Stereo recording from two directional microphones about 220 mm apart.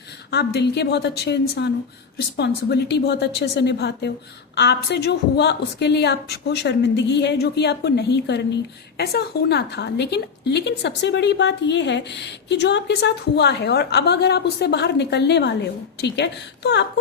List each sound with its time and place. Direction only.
0.3 s a woman's voice: 50° left (ahead or behind)